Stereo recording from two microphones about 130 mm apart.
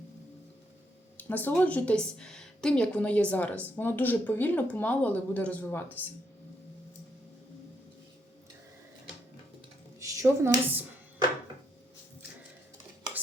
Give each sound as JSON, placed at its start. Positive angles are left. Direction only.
{"t": 1.1, "sound": "a woman's voice", "side_deg": 15}
{"t": 10.0, "sound": "speech", "side_deg": -20}